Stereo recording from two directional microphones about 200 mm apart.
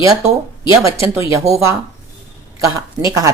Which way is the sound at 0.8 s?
15° right (ahead or behind).